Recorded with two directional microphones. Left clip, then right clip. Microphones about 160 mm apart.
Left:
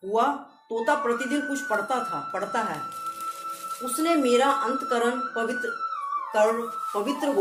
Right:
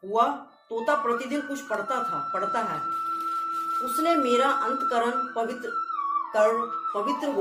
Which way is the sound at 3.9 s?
25° left (ahead or behind).